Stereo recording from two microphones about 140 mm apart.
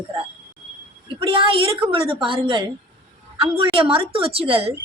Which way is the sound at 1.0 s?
40° right (ahead or behind).